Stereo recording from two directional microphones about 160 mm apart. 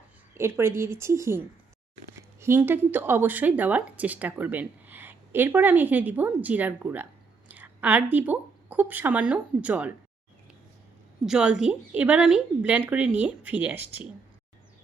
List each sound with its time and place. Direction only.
0.3 s a woman's voice: 15° right (ahead or behind)
2.4 s speech: 15° right (ahead or behind)
11.3 s a woman's voice: 5° right (ahead or behind)